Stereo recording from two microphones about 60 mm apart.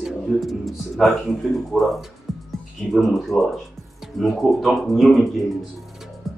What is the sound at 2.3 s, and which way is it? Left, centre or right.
Music, centre.